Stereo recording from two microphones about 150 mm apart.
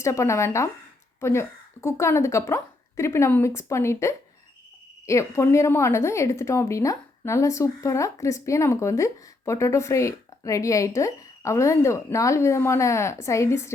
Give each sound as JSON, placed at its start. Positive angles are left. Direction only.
{"t": 0.0, "sound": "a woman's voice", "side_deg": 20}